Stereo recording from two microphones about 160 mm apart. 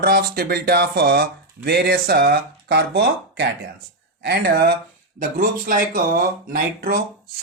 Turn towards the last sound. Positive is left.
turn(degrees=-65)  # may be behind; listen again after turning